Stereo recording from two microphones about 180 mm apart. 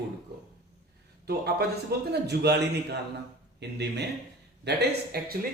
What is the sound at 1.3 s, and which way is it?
A man's voice, 65° right (ahead or behind).